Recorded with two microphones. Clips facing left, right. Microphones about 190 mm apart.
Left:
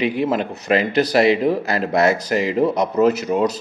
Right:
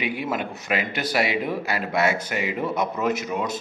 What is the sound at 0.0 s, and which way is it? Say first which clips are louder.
Speech: left 7 dB; 10° right (ahead or behind).